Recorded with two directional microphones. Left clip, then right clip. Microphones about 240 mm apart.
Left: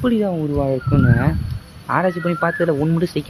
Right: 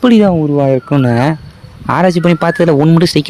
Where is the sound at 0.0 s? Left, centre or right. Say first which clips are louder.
Right 10 dB; right.